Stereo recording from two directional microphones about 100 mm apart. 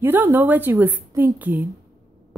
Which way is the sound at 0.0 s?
20° right (ahead or behind).